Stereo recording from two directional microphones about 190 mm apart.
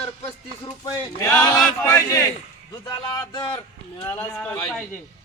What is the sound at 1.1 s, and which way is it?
A man's voice, 15° left (ahead or behind).